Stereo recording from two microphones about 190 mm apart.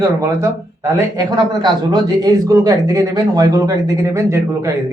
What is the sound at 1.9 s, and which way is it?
Speech, 20° right (ahead or behind).